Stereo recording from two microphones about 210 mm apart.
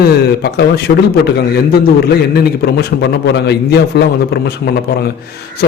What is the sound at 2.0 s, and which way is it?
A man's voice, 50° left (ahead or behind).